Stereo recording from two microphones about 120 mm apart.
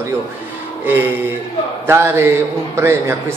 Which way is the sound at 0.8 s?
15° right (ahead or behind).